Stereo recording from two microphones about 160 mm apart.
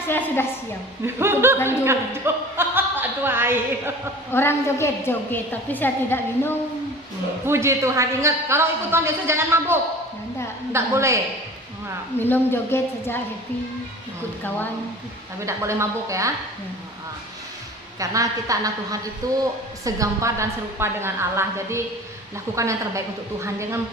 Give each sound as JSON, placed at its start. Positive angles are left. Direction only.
{"t": 1.0, "sound": "a woman's voice", "side_deg": -15}
{"t": 4.3, "sound": "a woman's voice", "side_deg": 15}
{"t": 7.4, "sound": "a woman's voice", "side_deg": -15}
{"t": 12.2, "sound": "a woman's voice", "side_deg": 15}
{"t": 15.4, "sound": "a woman's voice", "side_deg": -15}
{"t": 18.0, "sound": "a woman's voice", "side_deg": -20}